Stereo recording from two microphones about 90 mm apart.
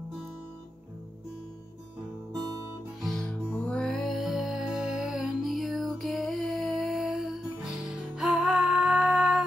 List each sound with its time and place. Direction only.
2.3 s guitar: 45° right (ahead or behind)
3.0 s music: 5° left (ahead or behind)